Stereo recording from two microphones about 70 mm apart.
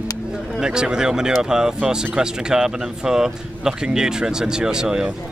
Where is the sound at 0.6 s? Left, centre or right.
Centre.